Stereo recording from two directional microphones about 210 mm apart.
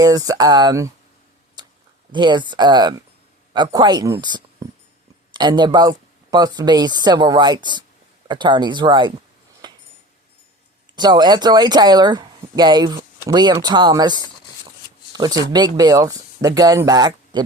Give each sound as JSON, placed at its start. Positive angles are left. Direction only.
{"t": 0.0, "sound": "speech", "side_deg": -15}
{"t": 2.1, "sound": "speech", "side_deg": -20}
{"t": 9.6, "sound": "a sound", "side_deg": -20}
{"t": 10.9, "sound": "speech", "side_deg": -20}